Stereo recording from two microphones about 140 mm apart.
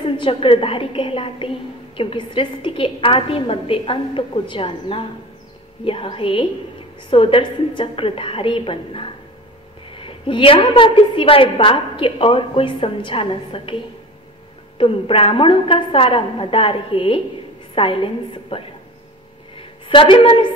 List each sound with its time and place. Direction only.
0.0 s a woman's voice: 40° left (ahead or behind)
14.8 s a woman's voice: 40° left (ahead or behind)
19.5 s a sound: 40° left (ahead or behind)